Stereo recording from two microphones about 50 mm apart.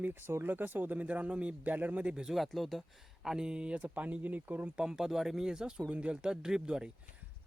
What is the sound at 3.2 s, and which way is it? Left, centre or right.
Speech, centre.